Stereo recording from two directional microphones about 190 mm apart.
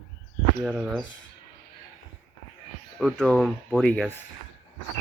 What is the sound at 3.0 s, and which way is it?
Speech, 5° left (ahead or behind).